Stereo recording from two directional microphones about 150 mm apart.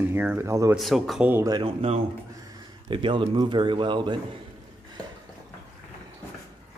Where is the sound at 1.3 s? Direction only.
20° right (ahead or behind).